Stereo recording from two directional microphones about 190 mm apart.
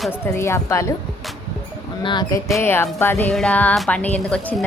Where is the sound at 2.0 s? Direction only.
25° left (ahead or behind).